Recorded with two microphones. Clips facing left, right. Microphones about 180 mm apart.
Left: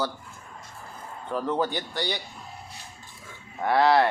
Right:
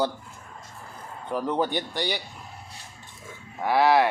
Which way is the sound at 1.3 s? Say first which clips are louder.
Right 1 dB; 15° right (ahead or behind).